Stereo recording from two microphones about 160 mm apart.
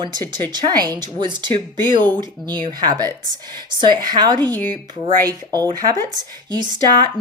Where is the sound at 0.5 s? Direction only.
25° right (ahead or behind).